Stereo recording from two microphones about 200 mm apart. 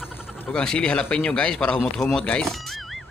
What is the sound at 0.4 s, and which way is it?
A man's voice, 5° left (ahead or behind).